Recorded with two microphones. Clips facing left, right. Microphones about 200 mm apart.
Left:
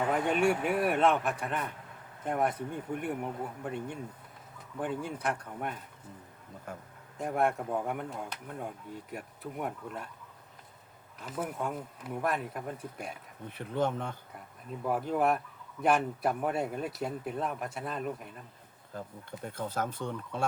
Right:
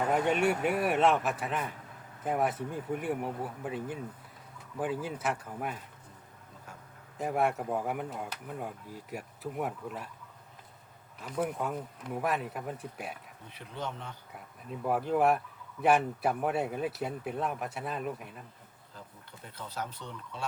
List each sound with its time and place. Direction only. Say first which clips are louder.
0.1 s speech: even; centre (ahead or behind)
6.7 s a sound: left 8 dB; 55° left (ahead or behind)
7.2 s speech: even; centre (ahead or behind)
11.2 s speech: right 2 dB; centre (ahead or behind)
13.5 s speech: left 8 dB; 50° left (ahead or behind)
14.3 s speech: even; centre (ahead or behind)
19.5 s speech: left 5 dB; 50° left (ahead or behind)